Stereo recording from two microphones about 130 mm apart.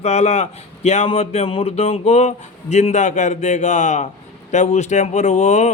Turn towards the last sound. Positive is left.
turn(degrees=60)  # may be behind; listen again after turning